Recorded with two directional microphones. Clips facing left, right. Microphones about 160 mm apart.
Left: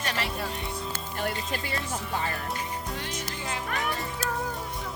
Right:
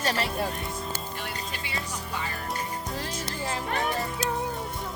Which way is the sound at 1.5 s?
45° left (ahead or behind).